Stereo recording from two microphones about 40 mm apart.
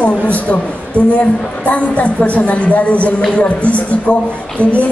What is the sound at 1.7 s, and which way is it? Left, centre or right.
Speech, left.